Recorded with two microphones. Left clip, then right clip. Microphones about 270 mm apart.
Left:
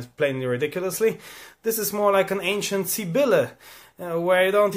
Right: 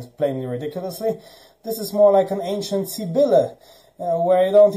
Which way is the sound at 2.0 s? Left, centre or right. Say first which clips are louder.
Right 6 dB; left.